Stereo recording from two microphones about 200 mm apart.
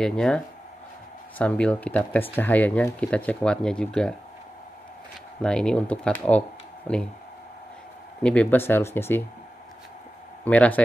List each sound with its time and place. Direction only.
0.0 s speech: 5° left (ahead or behind)
1.4 s speech: 5° left (ahead or behind)
5.4 s speech: 5° left (ahead or behind)
8.2 s speech: 5° left (ahead or behind)
10.4 s speech: 5° left (ahead or behind)